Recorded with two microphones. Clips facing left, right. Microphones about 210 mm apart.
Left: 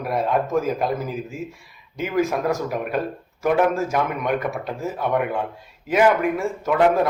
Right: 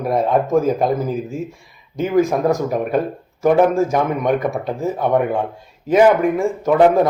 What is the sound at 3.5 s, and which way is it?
A man's voice, 35° right (ahead or behind).